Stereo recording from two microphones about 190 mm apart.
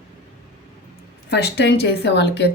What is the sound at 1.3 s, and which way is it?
Speech, 60° left (ahead or behind).